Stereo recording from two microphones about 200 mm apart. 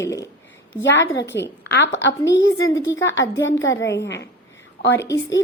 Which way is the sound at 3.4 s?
70° left (ahead or behind).